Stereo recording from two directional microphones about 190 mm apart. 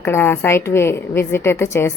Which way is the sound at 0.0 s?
10° left (ahead or behind).